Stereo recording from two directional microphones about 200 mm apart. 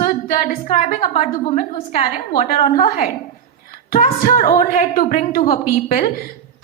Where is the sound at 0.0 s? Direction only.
45° left (ahead or behind).